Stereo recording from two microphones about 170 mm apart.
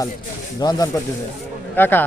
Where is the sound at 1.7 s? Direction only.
10° left (ahead or behind).